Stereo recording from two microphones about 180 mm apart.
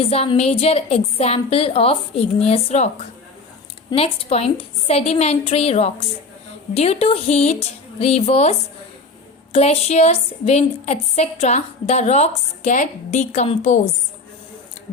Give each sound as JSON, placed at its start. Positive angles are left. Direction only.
{"t": 0.0, "sound": "a woman's voice", "side_deg": 35}